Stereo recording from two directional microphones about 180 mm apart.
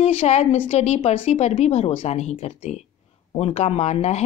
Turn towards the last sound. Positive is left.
turn(degrees=40)  # may be behind; listen again after turning